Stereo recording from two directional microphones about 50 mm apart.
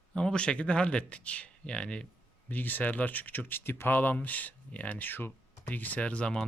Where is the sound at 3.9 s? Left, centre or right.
Left.